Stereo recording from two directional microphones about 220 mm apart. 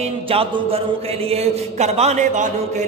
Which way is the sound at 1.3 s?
30° right (ahead or behind).